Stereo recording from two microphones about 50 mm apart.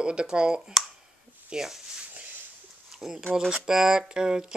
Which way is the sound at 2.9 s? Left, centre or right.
Centre.